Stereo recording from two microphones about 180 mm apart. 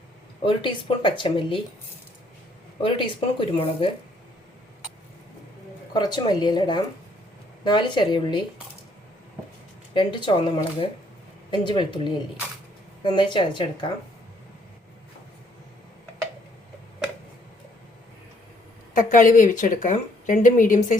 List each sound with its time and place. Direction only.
0.4 s speech: 30° left (ahead or behind)
2.8 s speech: 30° left (ahead or behind)
5.9 s speech: 25° left (ahead or behind)
9.9 s speech: 25° left (ahead or behind)
18.9 s speech: 45° left (ahead or behind)